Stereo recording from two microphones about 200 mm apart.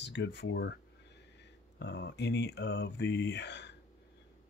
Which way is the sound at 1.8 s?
60° left (ahead or behind).